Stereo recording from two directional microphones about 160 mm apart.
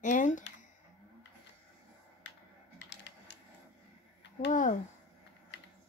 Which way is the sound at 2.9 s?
90° left.